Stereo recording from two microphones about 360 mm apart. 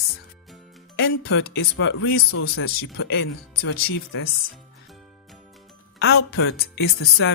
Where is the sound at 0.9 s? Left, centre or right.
Left.